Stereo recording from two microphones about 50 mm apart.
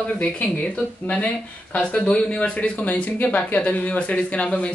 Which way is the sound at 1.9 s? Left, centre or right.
Left.